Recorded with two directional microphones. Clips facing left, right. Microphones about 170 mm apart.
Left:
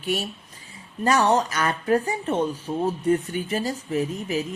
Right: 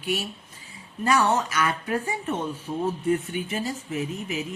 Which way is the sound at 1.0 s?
40° left (ahead or behind).